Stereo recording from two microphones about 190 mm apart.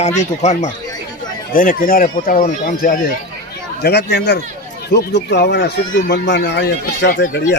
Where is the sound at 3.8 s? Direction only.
60° left (ahead or behind).